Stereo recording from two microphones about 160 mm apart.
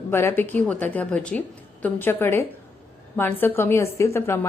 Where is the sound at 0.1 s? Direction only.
15° left (ahead or behind).